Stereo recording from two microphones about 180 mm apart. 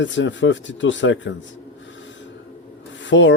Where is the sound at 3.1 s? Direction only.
90° left.